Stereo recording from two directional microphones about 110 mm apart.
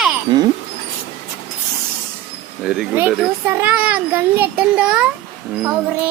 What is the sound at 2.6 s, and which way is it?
Speech, centre (ahead or behind).